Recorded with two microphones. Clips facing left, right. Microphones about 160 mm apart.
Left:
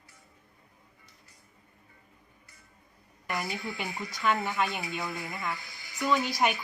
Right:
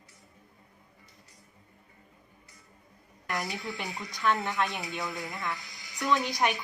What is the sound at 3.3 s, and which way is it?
A woman's voice, 5° left (ahead or behind).